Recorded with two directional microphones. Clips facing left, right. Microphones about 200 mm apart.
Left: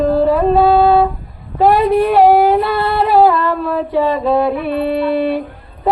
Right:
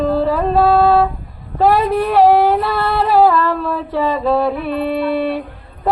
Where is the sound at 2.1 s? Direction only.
Centre (ahead or behind).